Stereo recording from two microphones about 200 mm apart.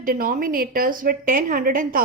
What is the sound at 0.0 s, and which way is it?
A woman's voice, 45° right (ahead or behind).